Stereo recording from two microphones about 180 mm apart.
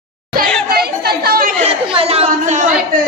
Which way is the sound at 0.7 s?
60° right (ahead or behind).